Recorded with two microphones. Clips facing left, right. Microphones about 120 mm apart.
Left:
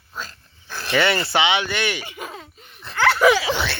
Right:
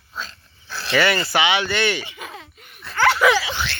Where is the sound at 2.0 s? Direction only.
45° left (ahead or behind).